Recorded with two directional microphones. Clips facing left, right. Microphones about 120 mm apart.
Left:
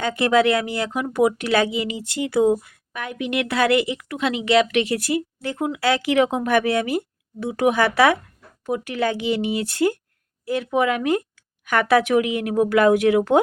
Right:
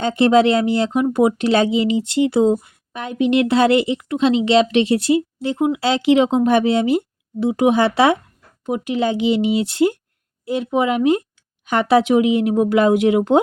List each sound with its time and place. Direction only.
0.0 s speech: 25° right (ahead or behind)